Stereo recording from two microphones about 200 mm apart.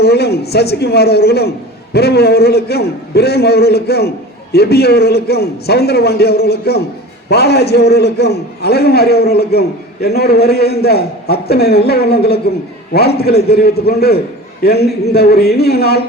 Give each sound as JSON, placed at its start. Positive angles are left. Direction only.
{"t": 0.0, "sound": "a man's voice", "side_deg": 55}